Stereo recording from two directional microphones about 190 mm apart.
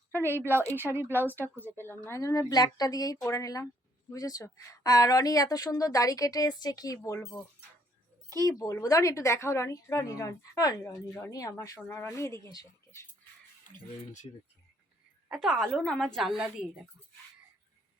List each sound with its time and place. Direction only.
0.3 s speech: 10° right (ahead or behind)
1.5 s speech: 10° left (ahead or behind)
15.3 s speech: centre (ahead or behind)